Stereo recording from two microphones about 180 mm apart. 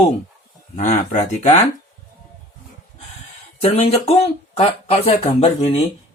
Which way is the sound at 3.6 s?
35° left (ahead or behind).